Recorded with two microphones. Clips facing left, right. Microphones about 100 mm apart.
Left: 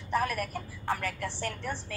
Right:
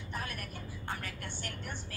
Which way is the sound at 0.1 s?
90° left.